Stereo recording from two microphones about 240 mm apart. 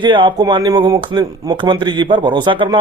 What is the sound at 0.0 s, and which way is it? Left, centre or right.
Speech, centre.